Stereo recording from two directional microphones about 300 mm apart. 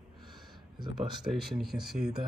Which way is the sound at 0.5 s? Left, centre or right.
Centre.